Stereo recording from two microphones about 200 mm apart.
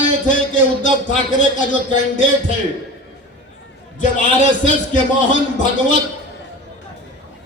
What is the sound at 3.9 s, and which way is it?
A man's voice, 40° left (ahead or behind).